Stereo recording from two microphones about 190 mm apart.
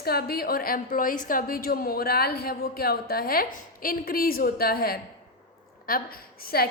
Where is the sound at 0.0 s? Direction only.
55° left (ahead or behind).